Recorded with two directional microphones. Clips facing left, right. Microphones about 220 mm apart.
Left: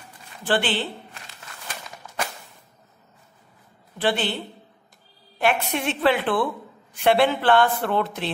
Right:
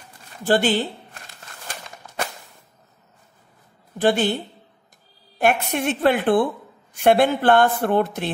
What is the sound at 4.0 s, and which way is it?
Speech, 45° right (ahead or behind).